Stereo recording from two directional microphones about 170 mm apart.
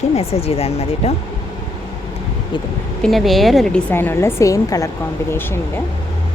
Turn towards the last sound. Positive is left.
turn(degrees=15)  # may be behind; listen again after turning